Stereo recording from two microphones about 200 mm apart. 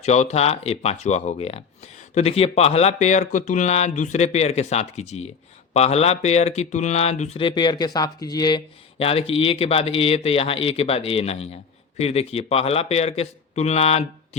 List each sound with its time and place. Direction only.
0.0 s speech: 35° left (ahead or behind)